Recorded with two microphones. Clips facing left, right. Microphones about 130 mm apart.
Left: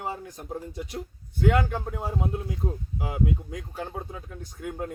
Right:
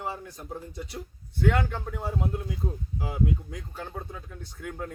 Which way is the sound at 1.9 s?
25° left (ahead or behind).